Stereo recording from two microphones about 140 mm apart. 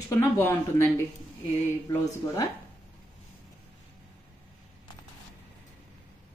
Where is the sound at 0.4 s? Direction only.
15° left (ahead or behind).